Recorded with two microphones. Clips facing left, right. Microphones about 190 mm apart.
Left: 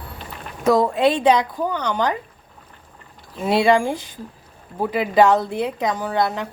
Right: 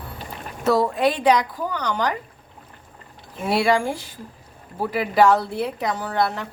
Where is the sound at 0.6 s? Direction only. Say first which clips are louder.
Left 3 dB; 15° left (ahead or behind).